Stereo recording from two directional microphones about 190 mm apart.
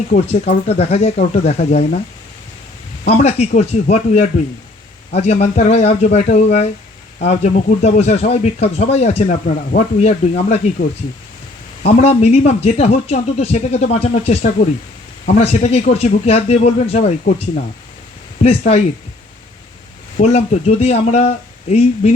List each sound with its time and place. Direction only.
0.3 s speech: 30° left (ahead or behind)
1.1 s speech: 45° left (ahead or behind)
3.1 s speech: 35° left (ahead or behind)
11.9 s speech: 35° left (ahead or behind)
20.1 s speech: 35° left (ahead or behind)